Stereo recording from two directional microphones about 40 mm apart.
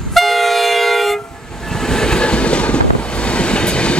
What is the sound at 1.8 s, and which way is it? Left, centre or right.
Train, centre.